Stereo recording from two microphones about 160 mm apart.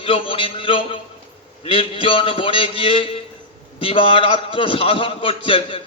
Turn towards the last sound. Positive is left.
turn(degrees=35)  # may be behind; listen again after turning